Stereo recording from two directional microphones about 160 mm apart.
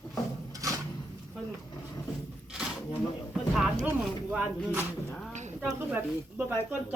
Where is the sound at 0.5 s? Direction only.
20° right (ahead or behind).